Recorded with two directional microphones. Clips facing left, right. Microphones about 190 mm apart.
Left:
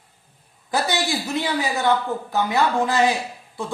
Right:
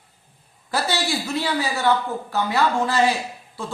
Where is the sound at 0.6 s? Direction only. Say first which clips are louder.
Left 1 dB; 20° left (ahead or behind).